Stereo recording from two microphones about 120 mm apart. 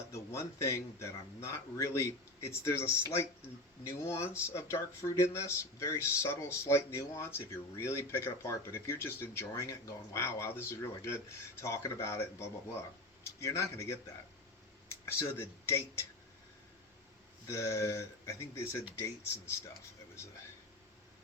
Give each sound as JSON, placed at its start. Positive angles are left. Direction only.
{"t": 0.1, "sound": "speech", "side_deg": 25}
{"t": 15.0, "sound": "speech", "side_deg": 20}
{"t": 17.5, "sound": "speech", "side_deg": 25}